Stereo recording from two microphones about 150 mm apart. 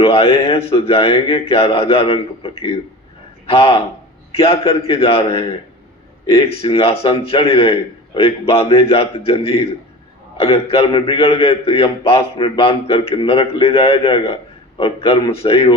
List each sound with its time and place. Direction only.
0.0 s a man's voice: 40° left (ahead or behind)